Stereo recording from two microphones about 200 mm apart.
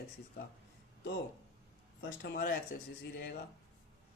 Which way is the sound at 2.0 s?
55° left (ahead or behind).